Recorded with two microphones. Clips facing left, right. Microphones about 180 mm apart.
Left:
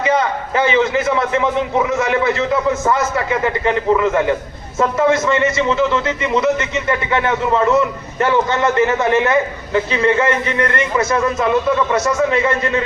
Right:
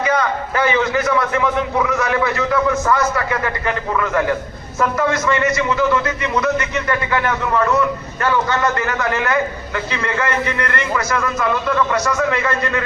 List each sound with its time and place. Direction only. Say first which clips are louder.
0.0 s a man's voice: left 2 dB; 25° left (ahead or behind)